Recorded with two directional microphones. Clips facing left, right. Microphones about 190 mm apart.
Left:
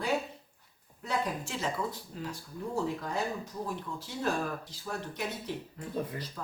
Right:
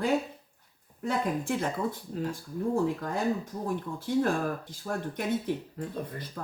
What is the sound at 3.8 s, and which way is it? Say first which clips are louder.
Speech: right 10 dB; 55° right (ahead or behind).